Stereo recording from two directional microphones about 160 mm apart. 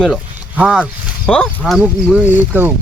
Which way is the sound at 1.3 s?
5° left (ahead or behind).